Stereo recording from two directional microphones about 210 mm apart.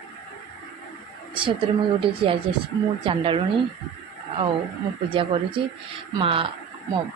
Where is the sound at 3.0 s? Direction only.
25° right (ahead or behind).